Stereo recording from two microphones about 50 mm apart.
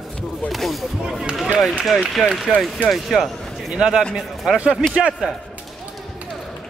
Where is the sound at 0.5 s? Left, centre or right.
Centre.